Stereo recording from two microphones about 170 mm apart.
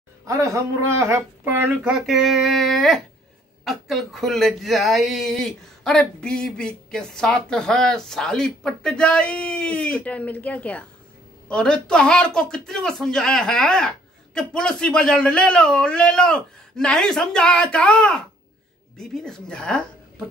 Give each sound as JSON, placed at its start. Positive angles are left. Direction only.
{"t": 0.3, "sound": "speech", "side_deg": -20}